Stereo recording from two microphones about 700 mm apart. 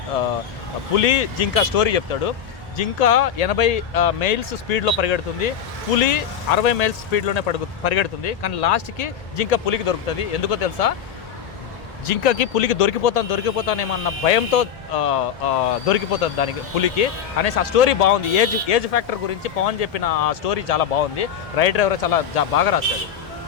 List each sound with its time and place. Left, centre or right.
0.9 s speech: left
12.0 s speech: left